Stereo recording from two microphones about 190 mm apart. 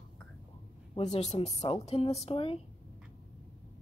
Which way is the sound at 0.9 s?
35° left (ahead or behind).